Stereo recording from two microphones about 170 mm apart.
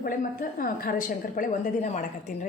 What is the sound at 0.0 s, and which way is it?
A woman's voice, 55° left (ahead or behind).